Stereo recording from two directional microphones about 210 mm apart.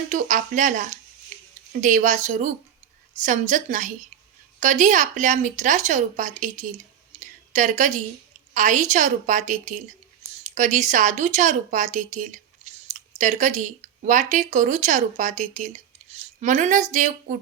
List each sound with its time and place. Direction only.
0.1 s a woman's voice: 35° right (ahead or behind)
7.2 s a sound: 35° right (ahead or behind)
8.5 s a woman's voice: 35° right (ahead or behind)